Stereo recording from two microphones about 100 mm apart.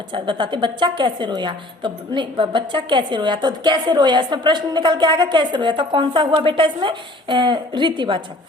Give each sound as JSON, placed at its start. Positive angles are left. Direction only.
{"t": 0.1, "sound": "a woman's voice", "side_deg": -50}